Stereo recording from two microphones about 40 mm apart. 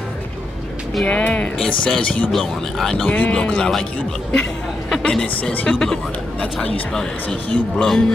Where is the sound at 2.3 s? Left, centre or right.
Centre.